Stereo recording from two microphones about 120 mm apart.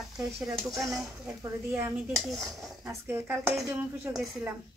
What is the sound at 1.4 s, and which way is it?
Speech, 20° right (ahead or behind).